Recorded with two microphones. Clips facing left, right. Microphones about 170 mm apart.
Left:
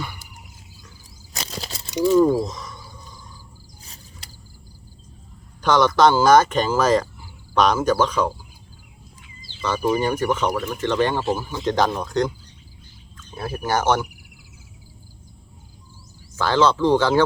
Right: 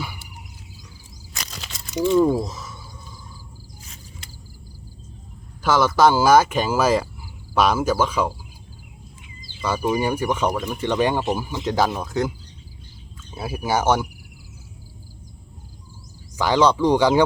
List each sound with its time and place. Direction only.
1.3 s a sound: 35° left (ahead or behind)
2.4 s a sound: 5° right (ahead or behind)
5.6 s speech: 5° right (ahead or behind)
9.5 s speech: 10° right (ahead or behind)
13.3 s speech: 10° right (ahead or behind)
16.4 s speech: 15° right (ahead or behind)